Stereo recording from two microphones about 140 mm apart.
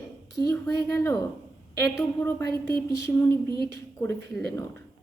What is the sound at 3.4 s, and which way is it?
Speech, 35° right (ahead or behind).